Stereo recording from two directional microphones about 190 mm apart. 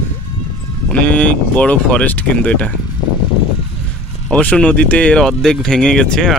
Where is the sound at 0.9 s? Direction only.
10° left (ahead or behind).